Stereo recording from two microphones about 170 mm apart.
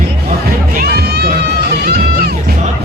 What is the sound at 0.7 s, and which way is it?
Music, 70° right (ahead or behind).